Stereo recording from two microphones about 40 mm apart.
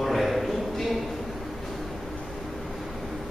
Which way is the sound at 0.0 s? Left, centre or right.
Centre.